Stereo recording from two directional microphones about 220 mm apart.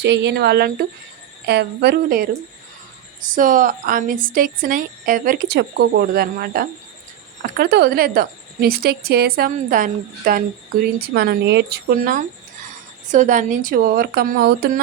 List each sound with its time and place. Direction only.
0.0 s a woman's voice: 50° right (ahead or behind)